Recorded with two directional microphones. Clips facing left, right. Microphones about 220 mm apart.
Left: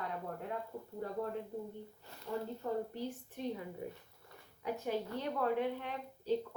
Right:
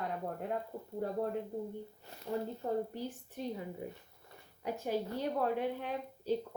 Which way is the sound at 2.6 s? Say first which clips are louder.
Right 2 dB; 40° right (ahead or behind).